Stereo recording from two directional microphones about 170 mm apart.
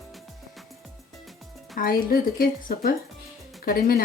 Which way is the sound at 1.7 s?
55° left (ahead or behind).